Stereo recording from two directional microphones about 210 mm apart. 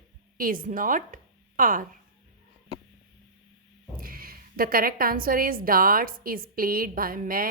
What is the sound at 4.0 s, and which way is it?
A woman's voice, 45° right (ahead or behind).